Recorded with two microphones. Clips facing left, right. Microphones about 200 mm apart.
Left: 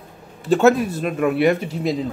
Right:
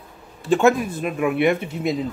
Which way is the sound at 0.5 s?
40° left (ahead or behind).